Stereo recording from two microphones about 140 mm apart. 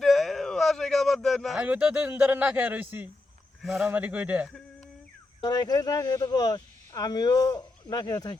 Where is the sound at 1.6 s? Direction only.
10° right (ahead or behind).